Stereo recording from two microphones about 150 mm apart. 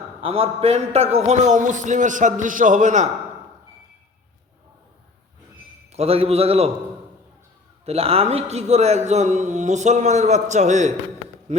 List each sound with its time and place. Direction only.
0.2 s a man's voice: 40° right (ahead or behind); by 3.1 s 55° right (ahead or behind)
5.9 s a man's voice: 45° right (ahead or behind)
7.9 s a man's voice: 40° right (ahead or behind)